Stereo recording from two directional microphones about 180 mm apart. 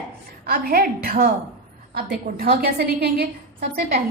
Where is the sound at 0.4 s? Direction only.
55° right (ahead or behind).